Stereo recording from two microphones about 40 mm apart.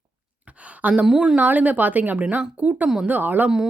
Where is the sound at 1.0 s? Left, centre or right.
Centre.